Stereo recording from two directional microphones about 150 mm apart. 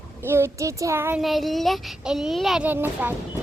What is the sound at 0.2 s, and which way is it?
Child singing, 15° right (ahead or behind).